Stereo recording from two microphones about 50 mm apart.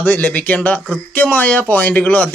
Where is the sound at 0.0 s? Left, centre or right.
Left.